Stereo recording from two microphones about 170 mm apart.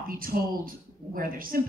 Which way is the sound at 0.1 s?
55° right (ahead or behind).